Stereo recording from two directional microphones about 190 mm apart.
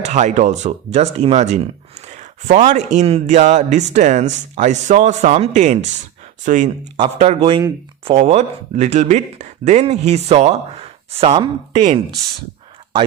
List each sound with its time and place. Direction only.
0.0 s speech: 40° right (ahead or behind)
7.0 s speech: 30° right (ahead or behind)